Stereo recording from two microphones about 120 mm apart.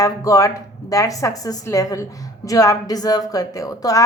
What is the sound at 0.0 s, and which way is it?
A woman's voice, 30° left (ahead or behind).